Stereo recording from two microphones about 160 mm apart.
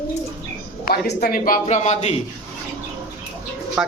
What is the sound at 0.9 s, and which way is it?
Speech, 75° left (ahead or behind).